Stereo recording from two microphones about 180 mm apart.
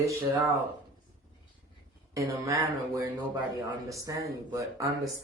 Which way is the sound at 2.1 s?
15° right (ahead or behind).